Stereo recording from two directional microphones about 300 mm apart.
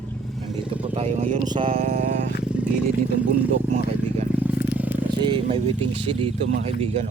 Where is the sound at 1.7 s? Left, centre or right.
Right.